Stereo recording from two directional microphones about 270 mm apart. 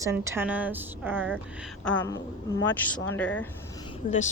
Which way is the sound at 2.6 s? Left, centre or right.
Centre.